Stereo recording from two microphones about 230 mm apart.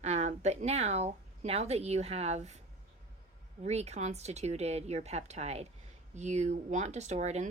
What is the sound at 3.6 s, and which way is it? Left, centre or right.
Speech, right.